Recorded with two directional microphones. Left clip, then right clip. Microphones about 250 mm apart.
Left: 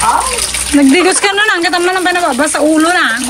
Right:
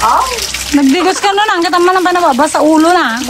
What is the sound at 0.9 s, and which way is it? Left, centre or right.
Speech, centre.